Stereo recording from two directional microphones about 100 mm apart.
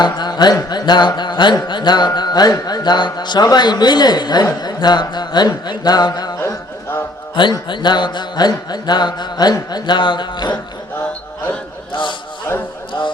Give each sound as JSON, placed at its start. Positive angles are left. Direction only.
{"t": 0.0, "sound": "music", "side_deg": 45}
{"t": 7.4, "sound": "music", "side_deg": 50}